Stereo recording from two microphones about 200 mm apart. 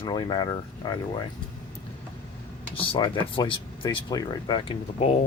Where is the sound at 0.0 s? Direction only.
20° left (ahead or behind).